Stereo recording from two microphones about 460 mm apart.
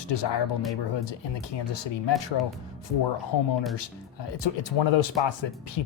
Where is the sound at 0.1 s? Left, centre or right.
Left.